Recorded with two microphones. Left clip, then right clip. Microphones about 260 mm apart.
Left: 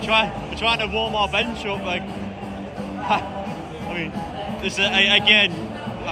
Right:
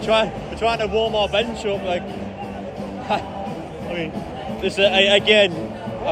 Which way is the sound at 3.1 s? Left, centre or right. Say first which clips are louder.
Left 1 dB; centre.